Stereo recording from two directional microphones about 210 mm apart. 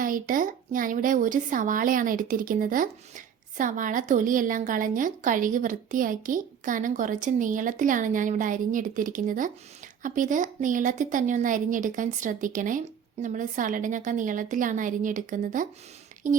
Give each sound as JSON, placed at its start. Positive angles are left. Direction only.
{"t": 0.0, "sound": "speech", "side_deg": -40}